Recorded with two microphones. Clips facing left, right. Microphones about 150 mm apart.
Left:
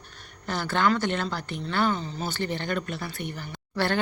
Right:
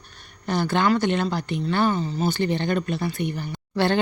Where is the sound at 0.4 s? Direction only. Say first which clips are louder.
Right 3 dB; 15° right (ahead or behind).